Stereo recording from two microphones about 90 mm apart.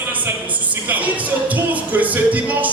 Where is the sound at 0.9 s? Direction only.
15° right (ahead or behind).